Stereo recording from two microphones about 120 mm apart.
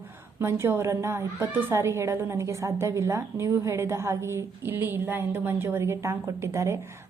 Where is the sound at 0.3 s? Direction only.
20° right (ahead or behind).